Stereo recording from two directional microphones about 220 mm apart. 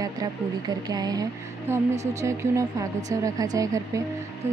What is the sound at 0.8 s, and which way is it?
Speech, 15° right (ahead or behind).